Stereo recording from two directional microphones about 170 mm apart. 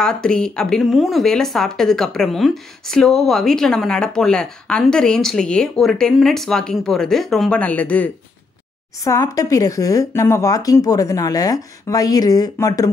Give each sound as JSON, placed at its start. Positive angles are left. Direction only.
{"t": 0.0, "sound": "speech", "side_deg": 5}
{"t": 9.0, "sound": "speech", "side_deg": 20}